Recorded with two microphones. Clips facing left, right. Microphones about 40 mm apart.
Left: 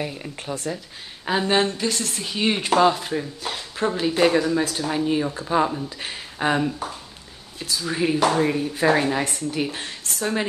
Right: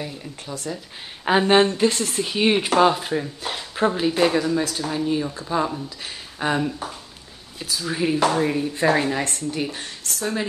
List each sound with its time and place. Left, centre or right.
0.0 s speech: left
1.2 s speech: right
4.2 s a woman's voice: centre
10.0 s speech: centre